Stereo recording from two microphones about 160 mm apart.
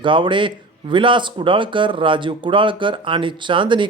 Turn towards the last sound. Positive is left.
turn(degrees=-30)  # may be behind; listen again after turning